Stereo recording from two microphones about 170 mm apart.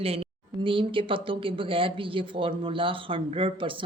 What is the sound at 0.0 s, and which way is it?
Speech, 35° right (ahead or behind).